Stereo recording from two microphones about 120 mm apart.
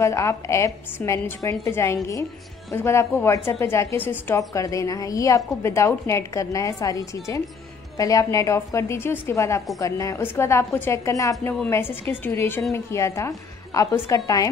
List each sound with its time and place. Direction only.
0.0 s a woman's voice: 25° left (ahead or behind)
4.4 s a woman's voice: 30° left (ahead or behind)